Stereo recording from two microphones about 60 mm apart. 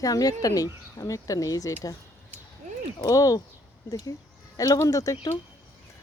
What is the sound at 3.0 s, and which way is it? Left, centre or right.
Speech, left.